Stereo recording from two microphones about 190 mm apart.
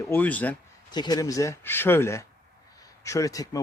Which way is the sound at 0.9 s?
20° left (ahead or behind).